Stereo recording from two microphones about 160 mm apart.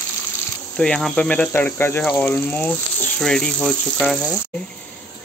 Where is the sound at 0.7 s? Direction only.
5° left (ahead or behind).